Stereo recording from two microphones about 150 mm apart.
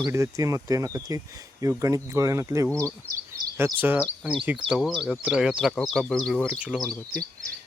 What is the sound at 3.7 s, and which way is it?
Speech, 10° right (ahead or behind).